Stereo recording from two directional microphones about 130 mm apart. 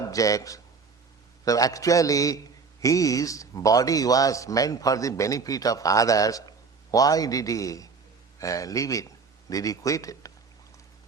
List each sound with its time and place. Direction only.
0.1 s speech: 25° left (ahead or behind)